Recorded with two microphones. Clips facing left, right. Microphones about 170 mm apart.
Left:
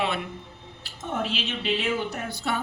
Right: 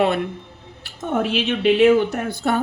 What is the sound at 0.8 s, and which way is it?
Speech, 60° right (ahead or behind).